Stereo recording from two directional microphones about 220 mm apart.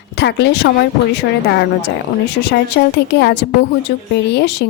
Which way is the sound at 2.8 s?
45° left (ahead or behind).